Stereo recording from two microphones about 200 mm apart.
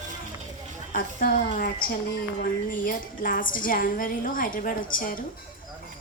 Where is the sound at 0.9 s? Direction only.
45° left (ahead or behind).